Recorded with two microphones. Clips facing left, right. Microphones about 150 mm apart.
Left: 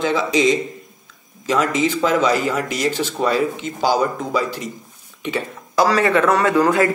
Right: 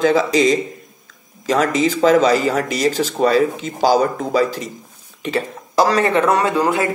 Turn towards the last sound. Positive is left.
turn(degrees=-20)  # may be behind; listen again after turning